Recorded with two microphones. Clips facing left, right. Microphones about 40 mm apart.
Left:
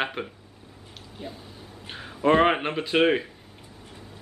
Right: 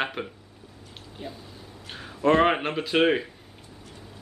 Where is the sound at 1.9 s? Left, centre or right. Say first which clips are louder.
Even; centre.